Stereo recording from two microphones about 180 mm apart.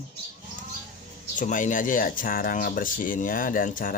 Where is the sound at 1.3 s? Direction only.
45° left (ahead or behind).